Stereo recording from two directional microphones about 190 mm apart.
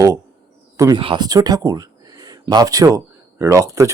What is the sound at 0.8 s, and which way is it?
Speech, 20° right (ahead or behind).